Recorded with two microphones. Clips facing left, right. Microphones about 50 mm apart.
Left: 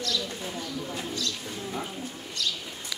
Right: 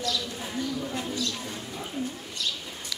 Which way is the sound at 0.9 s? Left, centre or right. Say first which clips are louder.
Right 2 dB; centre.